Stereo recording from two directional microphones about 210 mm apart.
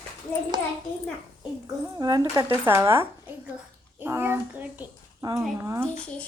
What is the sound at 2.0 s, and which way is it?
A child's voice, 20° right (ahead or behind).